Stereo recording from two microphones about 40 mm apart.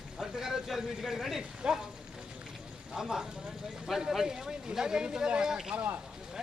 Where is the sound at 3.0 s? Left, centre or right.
Centre.